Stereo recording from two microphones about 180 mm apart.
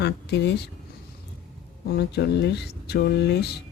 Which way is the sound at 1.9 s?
70° left (ahead or behind).